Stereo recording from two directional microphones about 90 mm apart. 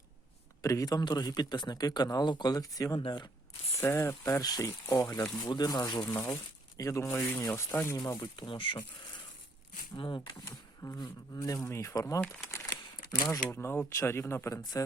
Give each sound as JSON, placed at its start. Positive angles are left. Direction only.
{"t": 0.6, "sound": "speech", "side_deg": 40}
{"t": 3.0, "sound": "speech", "side_deg": 55}
{"t": 3.8, "sound": "speech", "side_deg": 30}
{"t": 4.3, "sound": "speech", "side_deg": 40}
{"t": 6.1, "sound": "speech", "side_deg": 30}
{"t": 6.3, "sound": "speech", "side_deg": 40}
{"t": 8.2, "sound": "speech", "side_deg": 60}
{"t": 10.0, "sound": "speech", "side_deg": 55}
{"t": 12.6, "sound": "camera", "side_deg": 45}
{"t": 13.5, "sound": "speech", "side_deg": 30}
{"t": 14.8, "sound": "speech", "side_deg": 40}